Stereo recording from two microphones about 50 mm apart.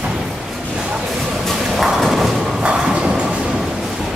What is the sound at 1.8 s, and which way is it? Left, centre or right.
Thump, centre.